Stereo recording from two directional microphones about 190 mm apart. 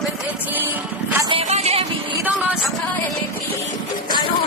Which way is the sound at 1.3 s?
30° right (ahead or behind).